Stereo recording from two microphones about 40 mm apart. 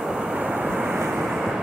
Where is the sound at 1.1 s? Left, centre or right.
Centre.